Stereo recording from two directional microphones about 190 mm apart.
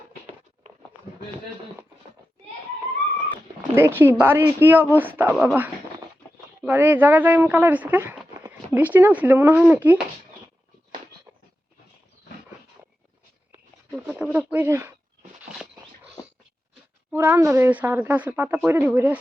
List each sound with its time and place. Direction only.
3.8 s speech: 10° right (ahead or behind)
5.3 s speech: centre (ahead or behind)
6.6 s speech: 10° right (ahead or behind)
13.9 s a sound: 5° right (ahead or behind)
14.3 s speech: 10° right (ahead or behind)
17.1 s speech: 10° right (ahead or behind)